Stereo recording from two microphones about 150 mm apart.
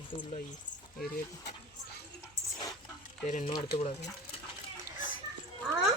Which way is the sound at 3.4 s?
40° left (ahead or behind).